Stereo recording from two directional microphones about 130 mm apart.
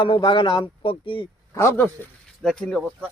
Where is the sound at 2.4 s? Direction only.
5° left (ahead or behind).